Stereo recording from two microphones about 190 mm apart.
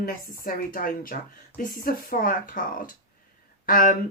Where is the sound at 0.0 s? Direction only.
50° left (ahead or behind).